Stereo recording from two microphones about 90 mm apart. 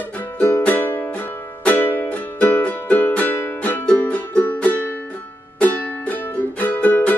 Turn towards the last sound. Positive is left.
turn(degrees=20)  # may be behind; listen again after turning